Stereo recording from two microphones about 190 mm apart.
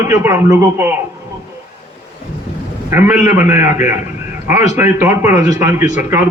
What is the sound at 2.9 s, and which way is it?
A man's voice, 10° right (ahead or behind).